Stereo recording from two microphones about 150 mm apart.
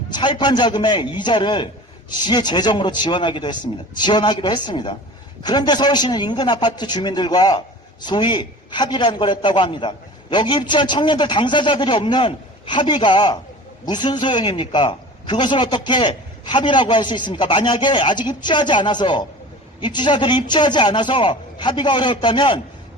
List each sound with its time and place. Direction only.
0.1 s a man's voice: 30° left (ahead or behind)